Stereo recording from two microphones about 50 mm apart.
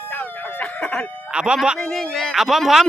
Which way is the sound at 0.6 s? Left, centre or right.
Left.